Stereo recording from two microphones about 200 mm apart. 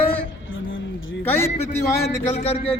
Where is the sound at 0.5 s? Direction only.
75° left (ahead or behind).